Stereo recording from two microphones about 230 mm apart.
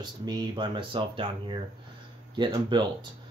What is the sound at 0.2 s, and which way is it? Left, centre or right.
Speech, centre.